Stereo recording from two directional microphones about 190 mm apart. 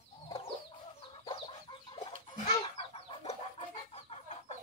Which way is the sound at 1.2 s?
25° left (ahead or behind).